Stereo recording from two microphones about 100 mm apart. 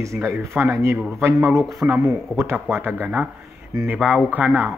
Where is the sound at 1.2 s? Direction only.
25° right (ahead or behind).